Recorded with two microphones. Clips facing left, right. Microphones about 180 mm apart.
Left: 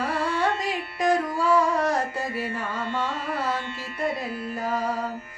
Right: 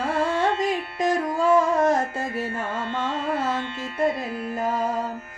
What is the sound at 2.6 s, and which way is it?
Carnatic music, 25° right (ahead or behind).